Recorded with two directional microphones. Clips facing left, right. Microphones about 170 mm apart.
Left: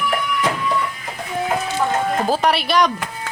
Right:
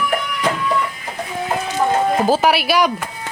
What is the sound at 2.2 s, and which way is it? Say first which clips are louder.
Speech: right 3 dB; 5° right (ahead or behind).